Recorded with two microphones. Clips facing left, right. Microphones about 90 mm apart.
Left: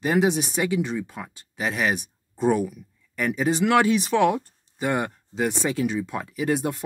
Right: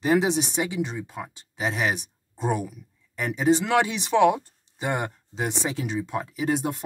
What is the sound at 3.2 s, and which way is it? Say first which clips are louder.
Speech: even; 30° right (ahead or behind).